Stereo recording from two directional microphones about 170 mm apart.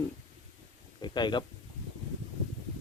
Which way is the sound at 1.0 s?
25° left (ahead or behind).